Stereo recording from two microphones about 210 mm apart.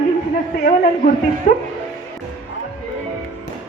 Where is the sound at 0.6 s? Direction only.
40° left (ahead or behind).